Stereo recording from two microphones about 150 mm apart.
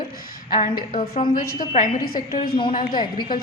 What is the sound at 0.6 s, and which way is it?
Speech, 70° left (ahead or behind).